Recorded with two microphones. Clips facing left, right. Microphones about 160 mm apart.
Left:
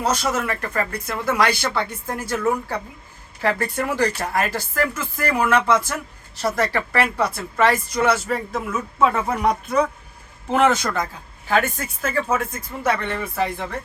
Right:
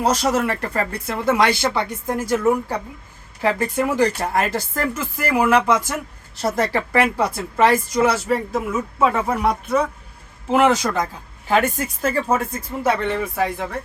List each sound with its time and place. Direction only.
0.0 s speech: 35° right (ahead or behind); by 4.1 s 15° right (ahead or behind)
4.2 s speech: 30° right (ahead or behind)
5.3 s speech: 10° right (ahead or behind)
12.0 s speech: 35° right (ahead or behind)
13.0 s speech: 15° right (ahead or behind)